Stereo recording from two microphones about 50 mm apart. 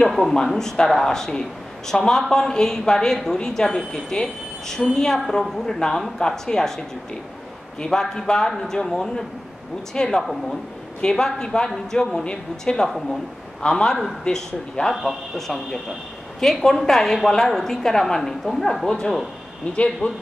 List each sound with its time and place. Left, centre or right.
0.5 s a woman's voice: centre
7.8 s a woman's voice: centre
19.7 s a man's voice: left